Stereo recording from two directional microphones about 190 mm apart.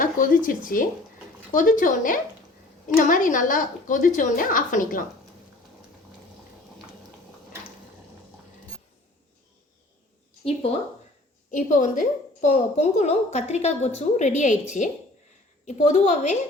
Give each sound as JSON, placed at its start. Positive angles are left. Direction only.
{"t": 0.0, "sound": "a woman's voice", "side_deg": 45}
{"t": 10.4, "sound": "a woman's voice", "side_deg": 30}
{"t": 15.6, "sound": "a woman's voice", "side_deg": 40}